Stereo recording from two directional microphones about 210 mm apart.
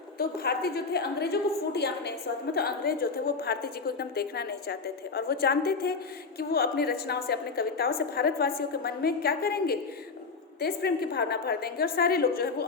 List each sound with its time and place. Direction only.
0.2 s a woman's voice: 45° left (ahead or behind)